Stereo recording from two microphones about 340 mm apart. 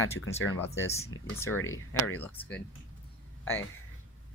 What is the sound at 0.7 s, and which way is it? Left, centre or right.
Speech, centre.